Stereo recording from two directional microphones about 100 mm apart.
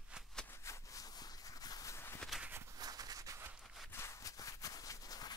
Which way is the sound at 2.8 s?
40° right (ahead or behind).